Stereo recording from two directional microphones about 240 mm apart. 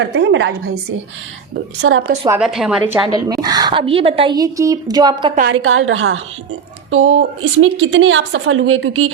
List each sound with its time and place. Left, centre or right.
0.0 s a woman's voice: right
1.8 s a woman's voice: right
2.4 s a woman's voice: centre
3.2 s a woman's voice: centre
5.5 s a woman's voice: right